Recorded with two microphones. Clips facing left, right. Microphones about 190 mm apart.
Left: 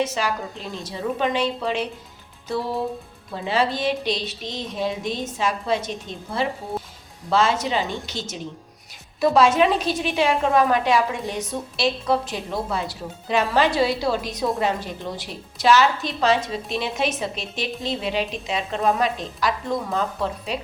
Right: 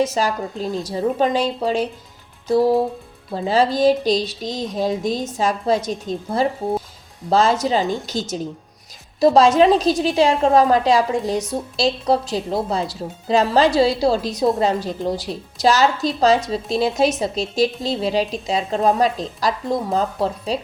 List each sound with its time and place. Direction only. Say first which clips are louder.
0.0 s speech: right 4 dB; 40° right (ahead or behind)